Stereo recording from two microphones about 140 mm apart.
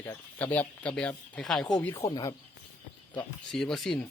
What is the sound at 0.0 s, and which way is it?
Speech, 15° left (ahead or behind).